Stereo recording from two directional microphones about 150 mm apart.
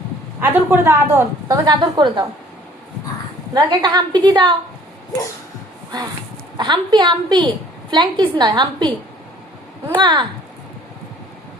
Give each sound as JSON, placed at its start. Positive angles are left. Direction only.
{"t": 0.4, "sound": "a woman's voice", "side_deg": -15}
{"t": 3.5, "sound": "a woman's voice", "side_deg": -30}
{"t": 6.6, "sound": "a woman's voice", "side_deg": -30}
{"t": 9.9, "sound": "a woman's voice", "side_deg": -30}